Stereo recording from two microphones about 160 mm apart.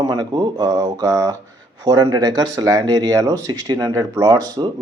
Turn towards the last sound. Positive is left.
turn(degrees=-25)  # may be behind; listen again after turning